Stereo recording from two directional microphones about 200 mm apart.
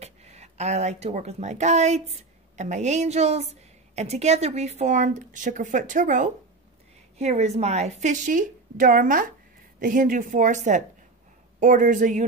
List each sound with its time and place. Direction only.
0.0 s a woman's voice: 35° right (ahead or behind)